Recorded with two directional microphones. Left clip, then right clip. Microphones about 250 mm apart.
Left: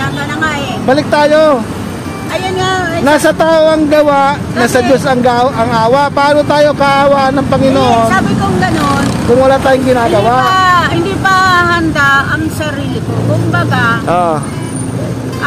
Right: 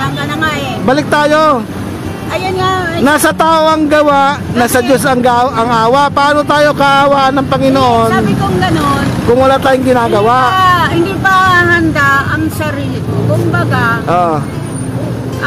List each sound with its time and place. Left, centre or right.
0.8 s speech: right
3.1 s speech: right
8.1 s speech: centre
9.4 s speech: right
10.5 s speech: centre
13.6 s speech: centre